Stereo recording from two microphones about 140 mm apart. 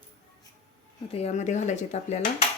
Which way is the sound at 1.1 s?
50° left (ahead or behind).